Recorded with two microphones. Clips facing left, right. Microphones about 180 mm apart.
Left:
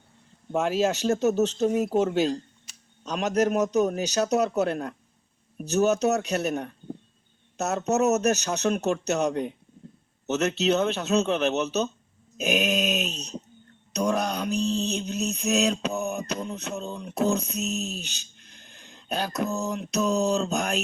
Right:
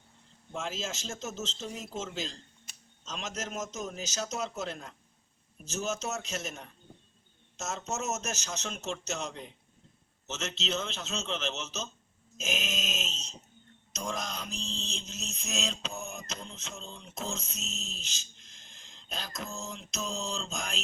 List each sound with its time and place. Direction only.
0.5 s mantra: 65° left (ahead or behind)